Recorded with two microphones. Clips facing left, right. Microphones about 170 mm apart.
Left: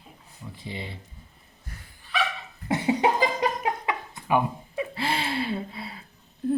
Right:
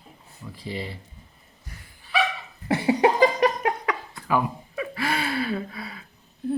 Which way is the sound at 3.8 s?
20° left (ahead or behind).